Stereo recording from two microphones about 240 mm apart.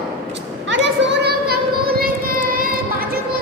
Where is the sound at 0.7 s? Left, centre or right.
Right.